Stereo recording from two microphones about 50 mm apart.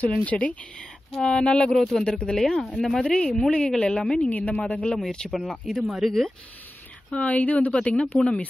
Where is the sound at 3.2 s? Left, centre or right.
Centre.